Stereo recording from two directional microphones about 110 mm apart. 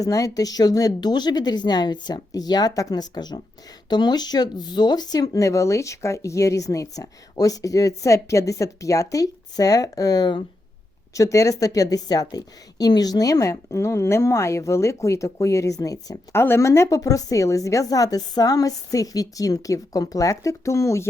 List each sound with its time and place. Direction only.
0.0 s speech: 30° left (ahead or behind)
11.1 s a woman's voice: 30° left (ahead or behind)